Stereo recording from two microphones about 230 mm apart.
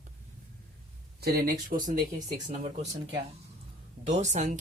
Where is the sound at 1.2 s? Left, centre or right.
Right.